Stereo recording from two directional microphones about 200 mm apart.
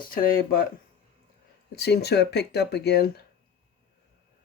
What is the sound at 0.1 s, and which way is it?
Speech, 45° left (ahead or behind).